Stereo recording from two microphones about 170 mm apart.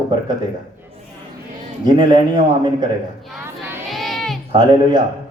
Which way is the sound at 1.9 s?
25° right (ahead or behind).